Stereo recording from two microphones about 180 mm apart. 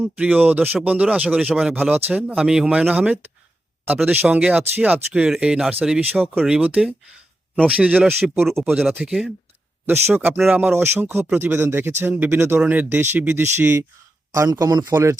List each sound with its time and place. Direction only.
0.0 s speech: 10° right (ahead or behind)